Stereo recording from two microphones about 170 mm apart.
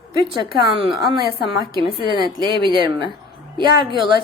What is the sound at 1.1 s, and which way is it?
A woman's voice, 25° right (ahead or behind).